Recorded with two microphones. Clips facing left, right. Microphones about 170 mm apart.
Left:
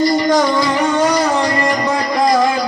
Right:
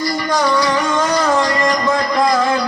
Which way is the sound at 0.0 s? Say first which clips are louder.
Left 5 dB; 20° left (ahead or behind).